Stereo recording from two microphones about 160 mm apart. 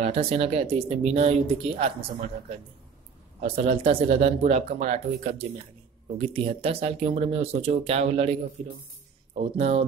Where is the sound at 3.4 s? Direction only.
40° right (ahead or behind).